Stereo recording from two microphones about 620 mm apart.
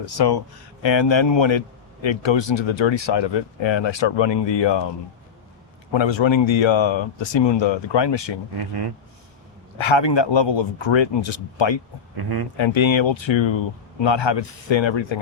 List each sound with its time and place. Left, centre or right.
0.0 s a man's voice: left
5.9 s a man's voice: left
8.5 s speech: right
9.7 s a man's voice: left
12.1 s speech: right
12.5 s a man's voice: left